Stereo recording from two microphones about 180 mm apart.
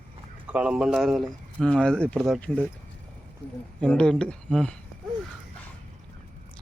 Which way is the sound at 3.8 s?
5° left (ahead or behind).